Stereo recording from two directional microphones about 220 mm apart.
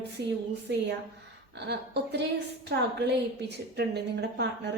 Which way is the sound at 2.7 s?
50° right (ahead or behind).